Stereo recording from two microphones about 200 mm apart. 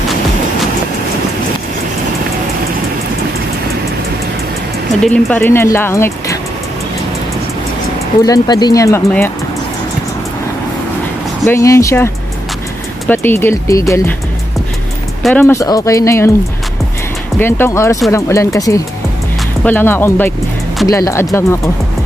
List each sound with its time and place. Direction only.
5.0 s speech: 5° left (ahead or behind)
8.3 s speech: 20° left (ahead or behind)
11.4 s speech: 15° left (ahead or behind)
13.1 s speech: 10° left (ahead or behind)
15.2 s speech: 10° left (ahead or behind)
17.4 s speech: 10° left (ahead or behind)